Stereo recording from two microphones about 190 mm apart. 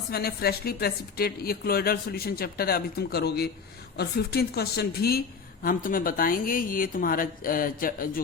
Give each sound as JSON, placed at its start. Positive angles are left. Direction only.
{"t": 0.1, "sound": "a woman's voice", "side_deg": 55}